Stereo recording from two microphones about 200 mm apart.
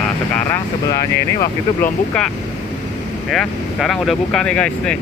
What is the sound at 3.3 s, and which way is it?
Speech, centre (ahead or behind).